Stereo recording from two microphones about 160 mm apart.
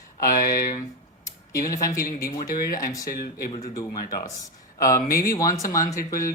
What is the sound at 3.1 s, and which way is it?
Speech, 75° left (ahead or behind).